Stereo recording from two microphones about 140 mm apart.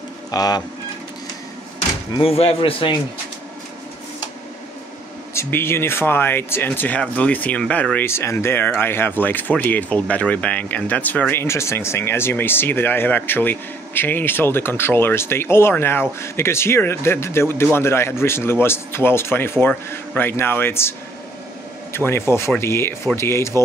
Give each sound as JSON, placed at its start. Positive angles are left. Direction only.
{"t": 0.3, "sound": "speech", "side_deg": 25}
{"t": 2.1, "sound": "a man's voice", "side_deg": 45}
{"t": 5.3, "sound": "speech", "side_deg": 20}
{"t": 21.9, "sound": "speech", "side_deg": 15}